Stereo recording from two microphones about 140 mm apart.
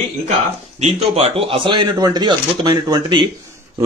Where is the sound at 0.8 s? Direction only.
45° right (ahead or behind).